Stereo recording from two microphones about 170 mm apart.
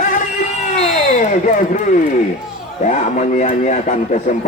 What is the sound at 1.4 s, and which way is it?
Speech, 50° left (ahead or behind).